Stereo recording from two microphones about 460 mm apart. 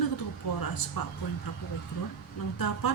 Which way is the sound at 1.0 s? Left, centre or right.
Left.